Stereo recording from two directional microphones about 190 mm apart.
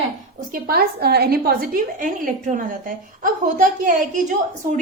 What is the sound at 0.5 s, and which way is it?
A woman's voice, 55° right (ahead or behind).